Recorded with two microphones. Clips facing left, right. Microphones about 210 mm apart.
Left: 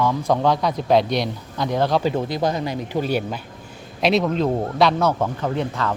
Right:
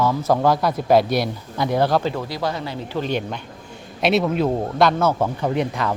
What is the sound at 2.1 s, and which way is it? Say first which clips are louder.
Speech: left 3 dB; 20° left (ahead or behind).